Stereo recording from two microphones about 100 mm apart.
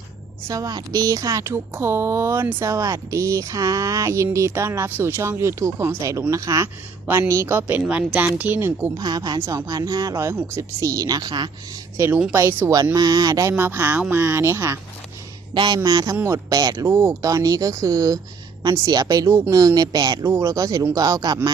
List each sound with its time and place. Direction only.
0.4 s a woman's voice: 35° right (ahead or behind); by 8.9 s 20° right (ahead or behind)
9.0 s a woman's voice: 40° right (ahead or behind)
10.3 s a woman's voice: 25° right (ahead or behind); by 11.5 s 45° right (ahead or behind)
12.3 s speech: 25° right (ahead or behind)
13.0 s a woman's voice: 40° right (ahead or behind)
13.5 s speech: 25° right (ahead or behind)
15.5 s a woman's voice: 50° right (ahead or behind)
16.8 s a woman's voice: 30° right (ahead or behind)
20.2 s a woman's voice: 30° right (ahead or behind)